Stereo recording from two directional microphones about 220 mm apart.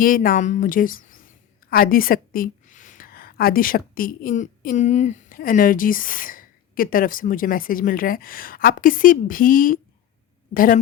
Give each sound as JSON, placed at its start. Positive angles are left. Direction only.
{"t": 0.0, "sound": "a woman's voice", "side_deg": 40}